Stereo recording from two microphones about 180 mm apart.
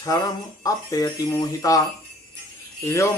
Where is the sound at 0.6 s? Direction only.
20° left (ahead or behind).